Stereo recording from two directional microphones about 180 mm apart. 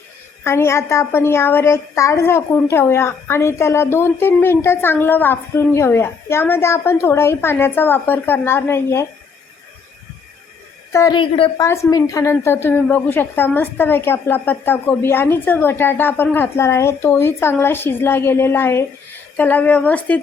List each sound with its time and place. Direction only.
0.4 s a woman's voice: 15° left (ahead or behind)
10.9 s a woman's voice: 20° left (ahead or behind)
11.6 s a woman's voice: 15° left (ahead or behind)